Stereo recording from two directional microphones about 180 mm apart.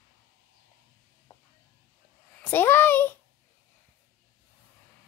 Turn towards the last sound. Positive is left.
turn(degrees=10)  # may be behind; listen again after turning